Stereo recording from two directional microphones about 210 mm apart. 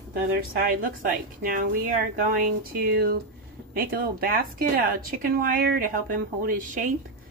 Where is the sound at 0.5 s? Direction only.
45° right (ahead or behind).